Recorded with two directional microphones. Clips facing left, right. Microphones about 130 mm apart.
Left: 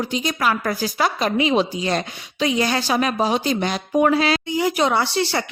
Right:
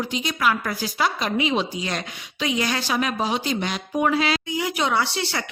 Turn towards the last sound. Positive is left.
turn(degrees=35)  # may be behind; listen again after turning